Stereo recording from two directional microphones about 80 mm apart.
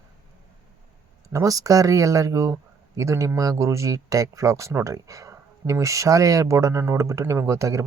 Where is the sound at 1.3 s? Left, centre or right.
Right.